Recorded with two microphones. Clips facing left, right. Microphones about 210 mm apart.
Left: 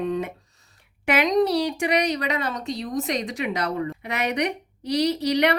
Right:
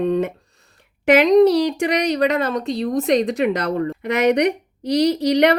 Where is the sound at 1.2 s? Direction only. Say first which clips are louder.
Right 7 dB; 60° right (ahead or behind).